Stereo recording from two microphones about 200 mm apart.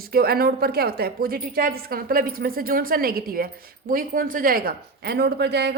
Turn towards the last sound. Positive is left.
turn(degrees=-55)  # may be behind; listen again after turning